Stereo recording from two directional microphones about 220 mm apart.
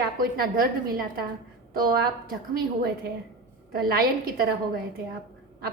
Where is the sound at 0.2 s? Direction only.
40° right (ahead or behind).